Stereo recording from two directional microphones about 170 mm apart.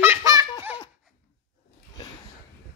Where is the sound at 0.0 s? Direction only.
20° right (ahead or behind).